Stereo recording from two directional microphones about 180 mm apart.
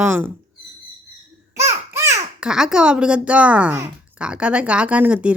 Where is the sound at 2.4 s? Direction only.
5° right (ahead or behind).